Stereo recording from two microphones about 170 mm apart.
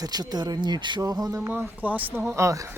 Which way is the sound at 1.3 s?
10° right (ahead or behind).